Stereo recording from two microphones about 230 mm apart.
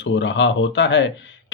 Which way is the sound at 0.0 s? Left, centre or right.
Left.